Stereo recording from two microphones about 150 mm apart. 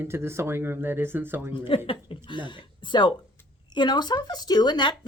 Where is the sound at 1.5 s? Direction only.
35° left (ahead or behind).